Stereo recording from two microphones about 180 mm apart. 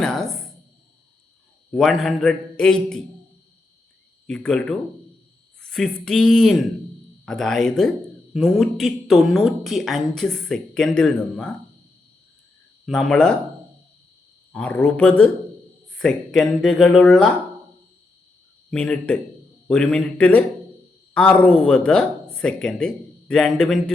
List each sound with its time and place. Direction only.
0.0 s speech: centre (ahead or behind)
1.7 s a woman's voice: centre (ahead or behind)
4.3 s a woman's voice: 5° left (ahead or behind)
12.8 s a woman's voice: centre (ahead or behind)
14.5 s a woman's voice: 10° left (ahead or behind)
18.7 s a woman's voice: 5° left (ahead or behind)